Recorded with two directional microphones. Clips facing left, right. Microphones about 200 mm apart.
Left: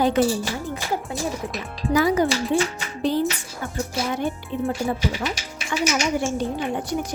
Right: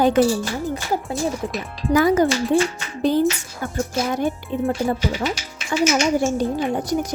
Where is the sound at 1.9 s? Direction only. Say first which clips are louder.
Right 3 dB; 50° right (ahead or behind).